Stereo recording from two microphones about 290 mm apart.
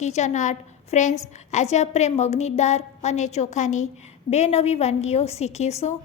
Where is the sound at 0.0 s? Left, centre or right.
Left.